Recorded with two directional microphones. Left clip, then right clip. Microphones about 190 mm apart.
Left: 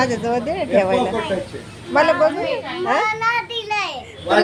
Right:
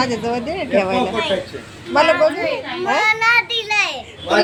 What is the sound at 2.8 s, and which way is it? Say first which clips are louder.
Children playing: right 3 dB; 10° left (ahead or behind).